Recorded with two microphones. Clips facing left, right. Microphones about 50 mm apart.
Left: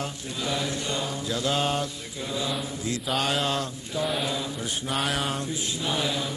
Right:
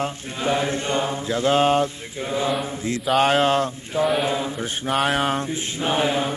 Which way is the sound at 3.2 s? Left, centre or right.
Right.